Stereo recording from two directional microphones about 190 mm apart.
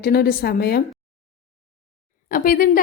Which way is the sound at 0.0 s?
55° left (ahead or behind).